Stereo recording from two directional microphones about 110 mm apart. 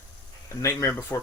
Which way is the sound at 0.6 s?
25° left (ahead or behind).